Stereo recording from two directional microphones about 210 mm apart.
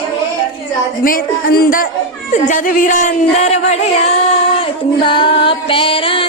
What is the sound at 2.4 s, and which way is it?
Music, 40° left (ahead or behind).